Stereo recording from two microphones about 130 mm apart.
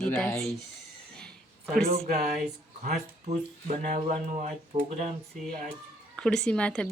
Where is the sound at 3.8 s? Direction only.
65° right (ahead or behind).